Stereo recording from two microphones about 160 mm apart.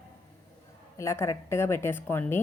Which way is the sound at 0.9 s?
15° left (ahead or behind).